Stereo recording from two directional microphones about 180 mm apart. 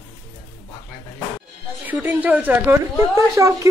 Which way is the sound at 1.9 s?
10° right (ahead or behind).